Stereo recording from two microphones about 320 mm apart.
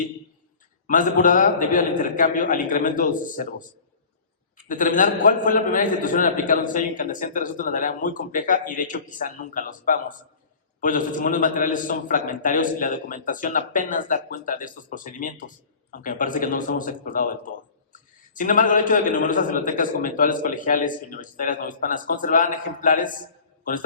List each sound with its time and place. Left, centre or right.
0.9 s a man's voice: left
4.7 s a man's voice: left